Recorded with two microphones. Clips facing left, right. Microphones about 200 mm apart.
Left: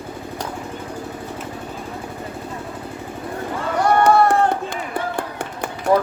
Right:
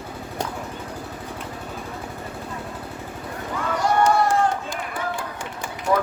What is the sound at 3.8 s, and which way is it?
Run, 60° left (ahead or behind).